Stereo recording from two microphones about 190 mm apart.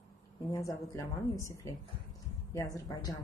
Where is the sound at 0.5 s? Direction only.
15° left (ahead or behind).